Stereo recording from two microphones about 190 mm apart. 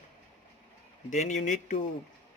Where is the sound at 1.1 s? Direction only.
40° left (ahead or behind).